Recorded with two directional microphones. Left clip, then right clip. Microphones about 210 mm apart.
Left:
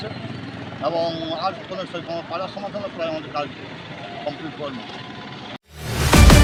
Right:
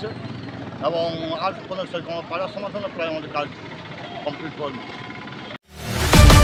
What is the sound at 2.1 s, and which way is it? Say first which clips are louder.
Speech: right 1 dB; 5° right (ahead or behind).